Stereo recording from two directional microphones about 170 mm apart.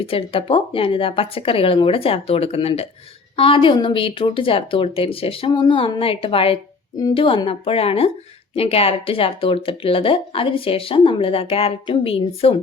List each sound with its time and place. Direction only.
0.0 s speech: 35° left (ahead or behind)